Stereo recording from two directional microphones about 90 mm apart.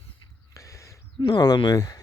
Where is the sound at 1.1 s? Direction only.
50° left (ahead or behind).